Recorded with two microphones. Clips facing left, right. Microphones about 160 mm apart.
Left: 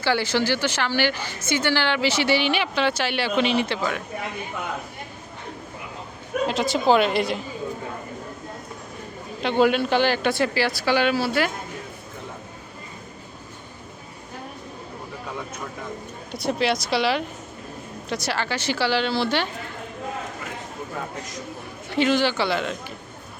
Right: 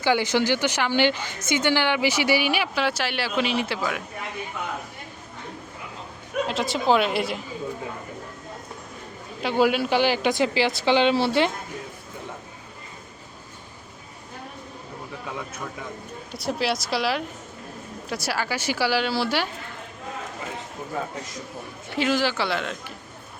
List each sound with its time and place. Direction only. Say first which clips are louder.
0.0 s a woman's voice: right 1 dB; 15° right (ahead or behind)
6.5 s a woman's voice: left 2 dB; centre (ahead or behind)
9.4 s a woman's voice: left 2 dB; 5° right (ahead or behind); by 11.5 s 25° right (ahead or behind)
16.3 s a woman's voice: left 3 dB; centre (ahead or behind)
21.9 s a woman's voice: left 3 dB; centre (ahead or behind)